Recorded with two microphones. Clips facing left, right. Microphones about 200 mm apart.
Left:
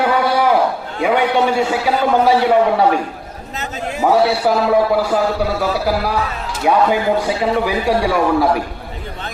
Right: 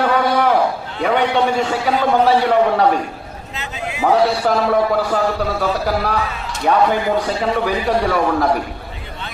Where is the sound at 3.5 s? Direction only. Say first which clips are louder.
Left 3 dB; 40° left (ahead or behind).